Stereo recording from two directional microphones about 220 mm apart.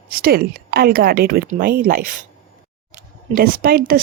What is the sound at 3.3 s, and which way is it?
Speech, 40° right (ahead or behind).